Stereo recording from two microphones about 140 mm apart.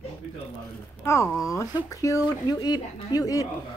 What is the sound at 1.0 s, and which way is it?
A woman's voice, 20° left (ahead or behind).